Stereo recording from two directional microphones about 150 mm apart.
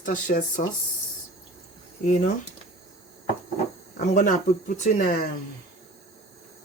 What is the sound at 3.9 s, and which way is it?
Speech, 60° left (ahead or behind).